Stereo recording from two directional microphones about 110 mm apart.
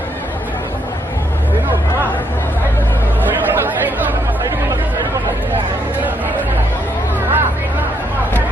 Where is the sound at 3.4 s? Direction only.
15° right (ahead or behind).